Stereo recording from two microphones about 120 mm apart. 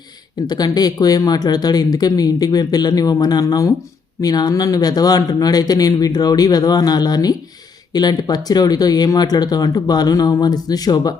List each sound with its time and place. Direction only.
0.4 s speech: 35° left (ahead or behind)